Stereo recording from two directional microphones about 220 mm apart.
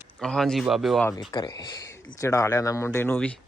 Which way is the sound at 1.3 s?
20° left (ahead or behind).